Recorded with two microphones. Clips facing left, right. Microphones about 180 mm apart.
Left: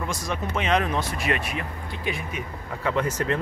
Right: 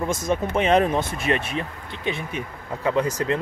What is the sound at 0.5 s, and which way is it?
Speech, 30° right (ahead or behind).